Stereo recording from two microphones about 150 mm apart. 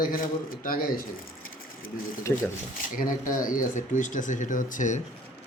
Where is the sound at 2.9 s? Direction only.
65° left (ahead or behind).